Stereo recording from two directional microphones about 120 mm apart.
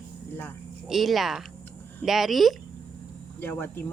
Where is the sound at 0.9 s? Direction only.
Centre (ahead or behind).